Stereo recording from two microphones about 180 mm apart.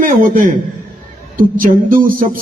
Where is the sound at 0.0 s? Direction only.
50° right (ahead or behind).